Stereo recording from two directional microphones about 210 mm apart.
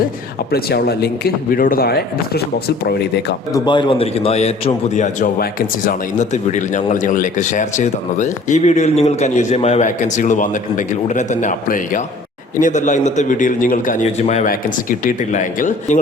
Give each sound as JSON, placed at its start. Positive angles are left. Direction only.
{"t": 0.5, "sound": "speech", "side_deg": 50}
{"t": 3.5, "sound": "a man's voice", "side_deg": 20}